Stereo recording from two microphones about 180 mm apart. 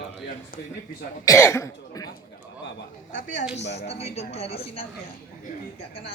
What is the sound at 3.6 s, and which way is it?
Speech, 70° left (ahead or behind).